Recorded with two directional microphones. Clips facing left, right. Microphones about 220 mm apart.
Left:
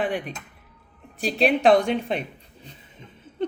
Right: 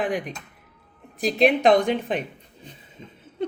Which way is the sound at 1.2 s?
10° right (ahead or behind).